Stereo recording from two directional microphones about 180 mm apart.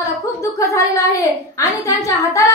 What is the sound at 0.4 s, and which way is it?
A woman's voice, 15° left (ahead or behind).